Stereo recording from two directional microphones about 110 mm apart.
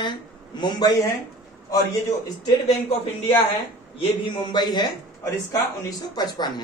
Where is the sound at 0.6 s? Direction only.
45° left (ahead or behind).